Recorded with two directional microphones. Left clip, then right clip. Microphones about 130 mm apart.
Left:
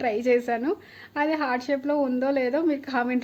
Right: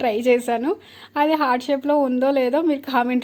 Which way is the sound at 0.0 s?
30° right (ahead or behind).